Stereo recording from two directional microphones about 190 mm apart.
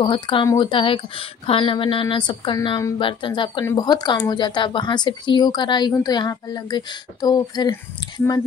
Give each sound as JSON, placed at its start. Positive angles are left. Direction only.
{"t": 0.0, "sound": "speech", "side_deg": 25}